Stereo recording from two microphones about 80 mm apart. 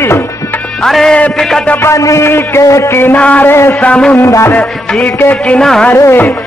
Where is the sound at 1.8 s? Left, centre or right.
Left.